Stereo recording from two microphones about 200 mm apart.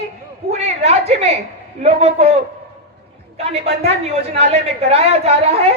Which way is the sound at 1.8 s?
30° right (ahead or behind).